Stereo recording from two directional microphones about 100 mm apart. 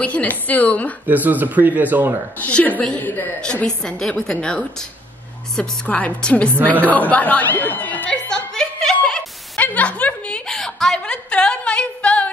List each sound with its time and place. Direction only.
0.0 s speech: 15° left (ahead or behind)
1.0 s speech: 15° right (ahead or behind)
2.3 s speech: 15° left (ahead or behind)
8.3 s chuckle: 5° left (ahead or behind)